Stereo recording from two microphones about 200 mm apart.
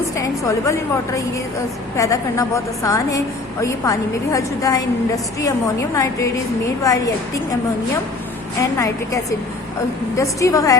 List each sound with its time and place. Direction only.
0.2 s a woman's voice: 15° left (ahead or behind)
10.2 s a woman's voice: 15° left (ahead or behind)